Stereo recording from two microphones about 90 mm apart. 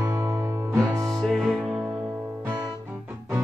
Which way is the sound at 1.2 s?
Centre (ahead or behind).